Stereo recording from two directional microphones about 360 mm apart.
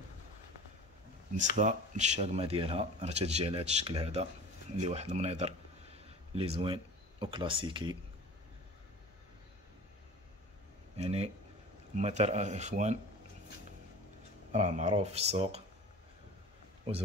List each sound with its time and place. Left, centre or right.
1.6 s speech: centre
11.0 s speech: centre
14.5 s speech: centre